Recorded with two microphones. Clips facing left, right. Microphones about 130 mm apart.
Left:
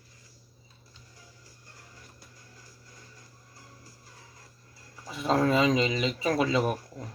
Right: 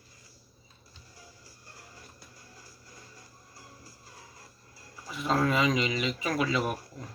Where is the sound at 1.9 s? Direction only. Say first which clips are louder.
Right 1 dB; 35° right (ahead or behind).